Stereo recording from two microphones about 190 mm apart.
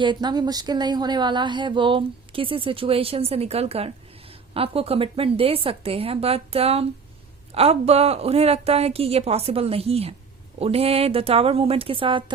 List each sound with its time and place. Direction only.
0.0 s a woman's voice: 25° right (ahead or behind)